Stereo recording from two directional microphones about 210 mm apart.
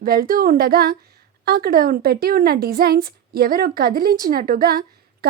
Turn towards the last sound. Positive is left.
turn(degrees=-45)  # may be behind; listen again after turning